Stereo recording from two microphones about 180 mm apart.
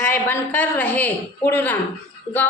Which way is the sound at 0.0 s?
10° left (ahead or behind).